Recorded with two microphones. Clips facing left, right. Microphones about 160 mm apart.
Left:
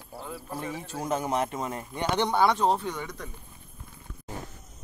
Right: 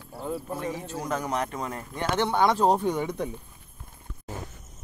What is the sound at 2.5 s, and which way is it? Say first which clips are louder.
Speech: right 3 dB; 10° right (ahead or behind).